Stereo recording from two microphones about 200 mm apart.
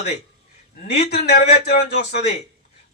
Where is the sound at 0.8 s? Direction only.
55° left (ahead or behind).